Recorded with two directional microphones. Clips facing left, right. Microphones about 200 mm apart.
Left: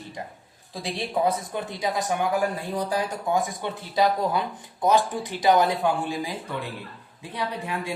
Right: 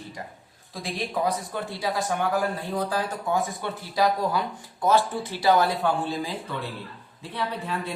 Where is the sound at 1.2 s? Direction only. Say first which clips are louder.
Left 2 dB; 20° left (ahead or behind).